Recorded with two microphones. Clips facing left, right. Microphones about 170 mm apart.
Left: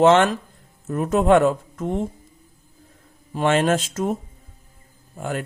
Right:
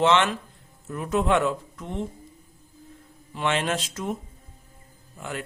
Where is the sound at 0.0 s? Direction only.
45° left (ahead or behind).